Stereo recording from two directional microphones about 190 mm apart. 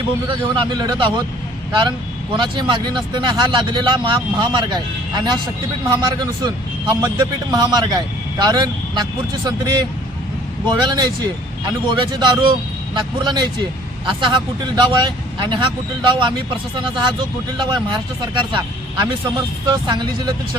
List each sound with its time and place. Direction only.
0.3 s speech: 25° right (ahead or behind)
2.3 s speech: 25° right (ahead or behind)